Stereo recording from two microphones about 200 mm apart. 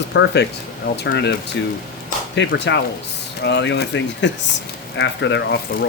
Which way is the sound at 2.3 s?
60° left (ahead or behind).